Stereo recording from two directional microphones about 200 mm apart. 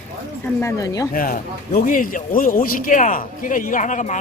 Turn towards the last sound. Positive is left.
turn(degrees=40)  # may be behind; listen again after turning